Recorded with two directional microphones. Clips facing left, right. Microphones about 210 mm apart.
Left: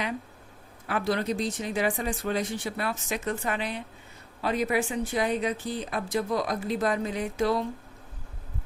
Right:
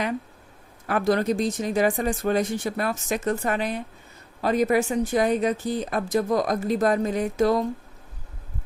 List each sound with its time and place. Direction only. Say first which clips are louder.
0.9 s speech: right 5 dB; 45° right (ahead or behind)